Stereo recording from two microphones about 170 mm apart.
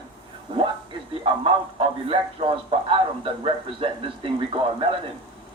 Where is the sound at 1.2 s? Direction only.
30° right (ahead or behind).